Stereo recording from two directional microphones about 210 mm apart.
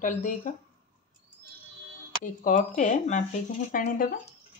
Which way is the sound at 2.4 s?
35° left (ahead or behind).